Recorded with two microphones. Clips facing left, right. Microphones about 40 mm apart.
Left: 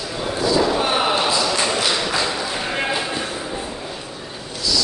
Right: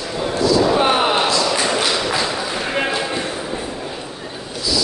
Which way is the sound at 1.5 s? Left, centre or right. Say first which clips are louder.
Right 2 dB; centre.